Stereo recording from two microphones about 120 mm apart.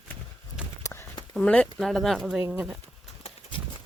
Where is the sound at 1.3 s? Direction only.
10° left (ahead or behind); by 2.6 s 10° right (ahead or behind).